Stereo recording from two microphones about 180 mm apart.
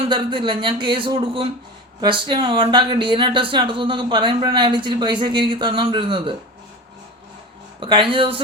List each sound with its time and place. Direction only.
0.1 s speech: 25° right (ahead or behind)
7.8 s speech: 30° right (ahead or behind)